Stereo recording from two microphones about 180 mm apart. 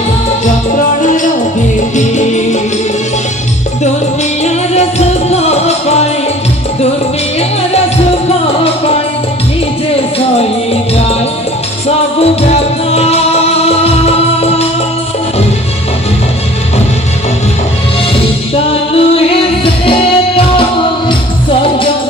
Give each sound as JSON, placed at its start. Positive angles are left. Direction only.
{"t": 2.0, "sound": "music", "side_deg": 40}
{"t": 4.7, "sound": "music", "side_deg": 35}
{"t": 12.2, "sound": "music", "side_deg": 35}
{"t": 18.5, "sound": "music", "side_deg": 30}